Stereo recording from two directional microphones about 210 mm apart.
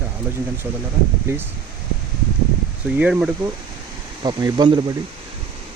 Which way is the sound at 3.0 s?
5° right (ahead or behind).